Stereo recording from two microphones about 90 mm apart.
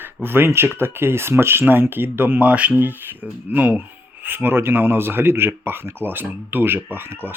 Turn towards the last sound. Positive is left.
turn(degrees=-25)  # may be behind; listen again after turning